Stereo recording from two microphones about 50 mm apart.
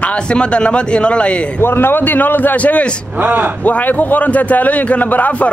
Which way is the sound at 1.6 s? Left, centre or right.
Left.